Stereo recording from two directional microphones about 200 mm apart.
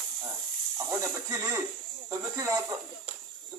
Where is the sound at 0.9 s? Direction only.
15° right (ahead or behind).